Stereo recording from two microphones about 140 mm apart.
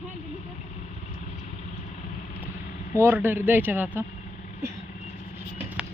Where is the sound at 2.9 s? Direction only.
15° right (ahead or behind).